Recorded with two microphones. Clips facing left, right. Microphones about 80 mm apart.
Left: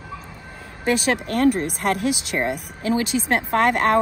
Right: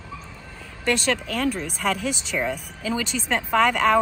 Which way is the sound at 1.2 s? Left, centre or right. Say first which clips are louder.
Left 6 dB; left.